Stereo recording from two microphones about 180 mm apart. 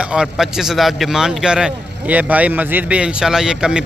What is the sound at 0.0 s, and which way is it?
A man's voice, 5° right (ahead or behind).